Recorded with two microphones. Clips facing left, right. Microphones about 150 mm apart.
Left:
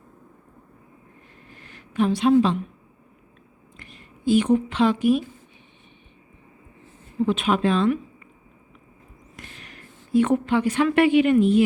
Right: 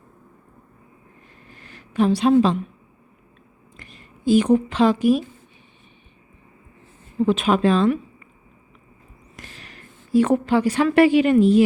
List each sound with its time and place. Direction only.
1.6 s a woman's voice: 35° right (ahead or behind)
3.8 s a woman's voice: 35° right (ahead or behind)
7.3 s a woman's voice: 40° right (ahead or behind)
9.3 s a woman's voice: 35° right (ahead or behind)